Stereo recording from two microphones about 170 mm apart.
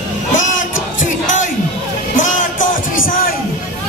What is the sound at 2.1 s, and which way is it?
Music, 50° left (ahead or behind).